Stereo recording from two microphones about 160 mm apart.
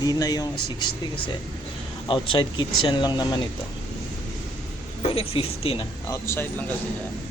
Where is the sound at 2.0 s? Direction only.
30° left (ahead or behind).